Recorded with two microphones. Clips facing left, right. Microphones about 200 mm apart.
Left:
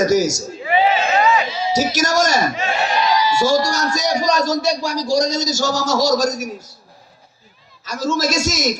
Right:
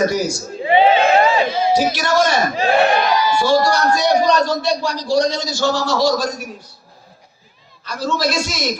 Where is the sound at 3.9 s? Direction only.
40° left (ahead or behind).